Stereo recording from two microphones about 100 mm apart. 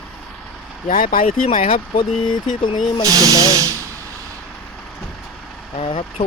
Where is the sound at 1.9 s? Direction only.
55° left (ahead or behind).